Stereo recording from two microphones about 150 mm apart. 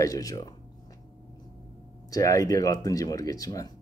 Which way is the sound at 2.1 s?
20° left (ahead or behind).